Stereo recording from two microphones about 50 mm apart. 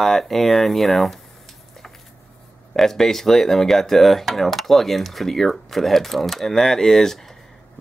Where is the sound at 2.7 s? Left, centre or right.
Centre.